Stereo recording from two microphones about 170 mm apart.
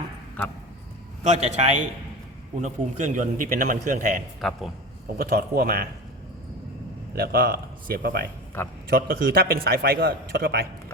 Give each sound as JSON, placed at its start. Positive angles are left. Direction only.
{"t": 1.2, "sound": "a man's voice", "side_deg": -40}
{"t": 4.4, "sound": "a man's voice", "side_deg": 0}
{"t": 5.1, "sound": "a man's voice", "side_deg": -65}
{"t": 7.2, "sound": "a man's voice", "side_deg": -60}